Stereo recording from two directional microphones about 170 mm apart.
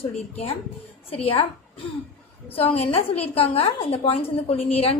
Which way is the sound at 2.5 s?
35° left (ahead or behind).